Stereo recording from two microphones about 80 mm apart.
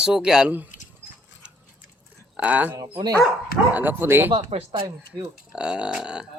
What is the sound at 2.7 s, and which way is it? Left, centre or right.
Speech, right.